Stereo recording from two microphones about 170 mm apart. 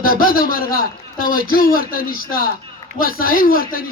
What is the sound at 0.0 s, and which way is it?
A man's voice, 60° left (ahead or behind).